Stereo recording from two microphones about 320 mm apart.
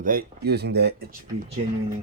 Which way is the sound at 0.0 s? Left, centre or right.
Right.